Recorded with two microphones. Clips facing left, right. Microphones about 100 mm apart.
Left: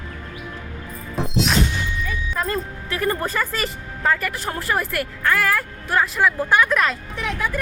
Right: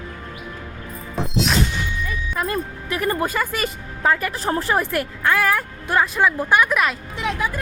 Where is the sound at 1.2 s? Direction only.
Centre (ahead or behind).